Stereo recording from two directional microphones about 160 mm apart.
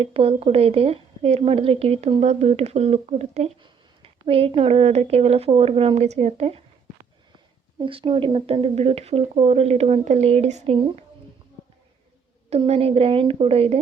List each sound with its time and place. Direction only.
0.0 s speech: 40° right (ahead or behind)
7.8 s speech: 30° right (ahead or behind)
12.5 s speech: 40° right (ahead or behind)